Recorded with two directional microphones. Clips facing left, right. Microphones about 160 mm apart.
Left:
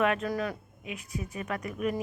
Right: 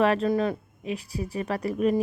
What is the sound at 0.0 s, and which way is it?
Speech, 30° right (ahead or behind).